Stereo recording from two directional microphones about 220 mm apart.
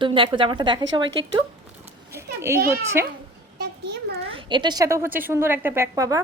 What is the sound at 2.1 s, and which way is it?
Speech, 10° right (ahead or behind).